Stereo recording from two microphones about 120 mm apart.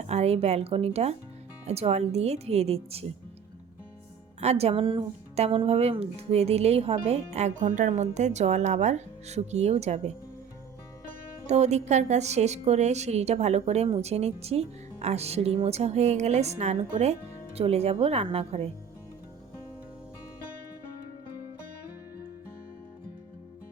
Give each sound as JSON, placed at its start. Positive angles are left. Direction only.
{"t": 0.0, "sound": "a woman's voice", "side_deg": -65}
{"t": 4.4, "sound": "speech", "side_deg": -60}
{"t": 11.4, "sound": "a woman's voice", "side_deg": -70}